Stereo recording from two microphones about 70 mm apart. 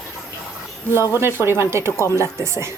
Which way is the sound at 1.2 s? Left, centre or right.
Right.